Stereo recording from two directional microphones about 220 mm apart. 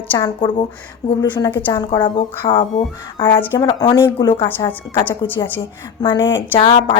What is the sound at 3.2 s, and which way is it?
A woman's voice, 10° left (ahead or behind).